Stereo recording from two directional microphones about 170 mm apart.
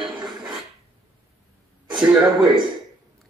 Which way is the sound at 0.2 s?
5° right (ahead or behind).